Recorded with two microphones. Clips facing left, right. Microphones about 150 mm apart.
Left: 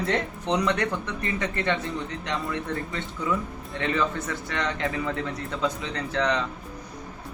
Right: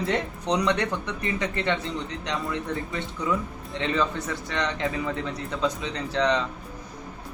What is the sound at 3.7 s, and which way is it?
Speech, 20° right (ahead or behind).